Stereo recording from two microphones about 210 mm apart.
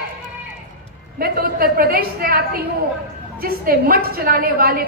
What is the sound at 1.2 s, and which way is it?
A woman's voice, 45° right (ahead or behind).